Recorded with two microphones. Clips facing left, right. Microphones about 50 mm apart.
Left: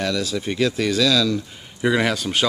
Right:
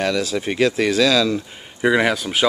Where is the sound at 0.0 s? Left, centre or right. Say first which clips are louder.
Right 3 dB; right.